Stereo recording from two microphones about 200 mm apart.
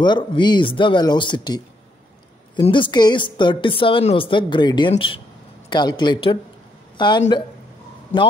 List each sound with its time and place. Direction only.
0.0 s a woman's voice: 20° left (ahead or behind)